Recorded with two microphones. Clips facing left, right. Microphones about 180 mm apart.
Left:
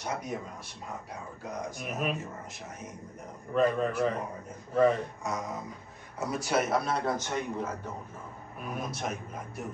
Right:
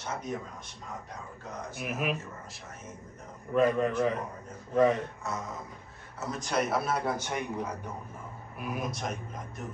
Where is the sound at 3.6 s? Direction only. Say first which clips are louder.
Right 1 dB; 5° right (ahead or behind).